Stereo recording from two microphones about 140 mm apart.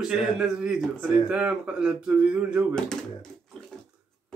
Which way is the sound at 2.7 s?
5° left (ahead or behind).